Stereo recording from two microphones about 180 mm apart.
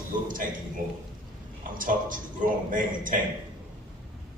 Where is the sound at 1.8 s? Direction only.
50° right (ahead or behind).